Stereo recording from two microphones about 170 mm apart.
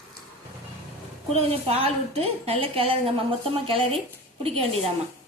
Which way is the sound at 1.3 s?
35° right (ahead or behind).